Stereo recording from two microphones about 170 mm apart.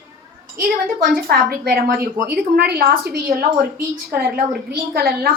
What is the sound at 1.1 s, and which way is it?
A woman's voice, 65° right (ahead or behind).